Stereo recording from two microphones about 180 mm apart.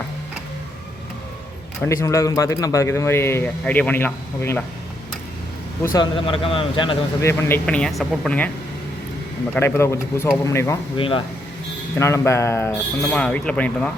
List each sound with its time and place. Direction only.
1.8 s speech: 15° left (ahead or behind)
5.8 s speech: 20° left (ahead or behind)
6.1 s a man's voice: 30° left (ahead or behind)
7.2 s speech: 15° left (ahead or behind)
9.6 s speech: 15° left (ahead or behind)
10.9 s a man's voice: 30° left (ahead or behind)
11.9 s speech: 15° left (ahead or behind)